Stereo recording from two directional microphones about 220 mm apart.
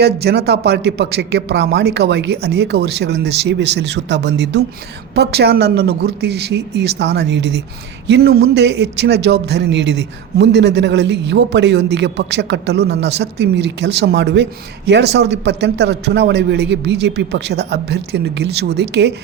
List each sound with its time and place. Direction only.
0.0 s a man's voice: 50° right (ahead or behind)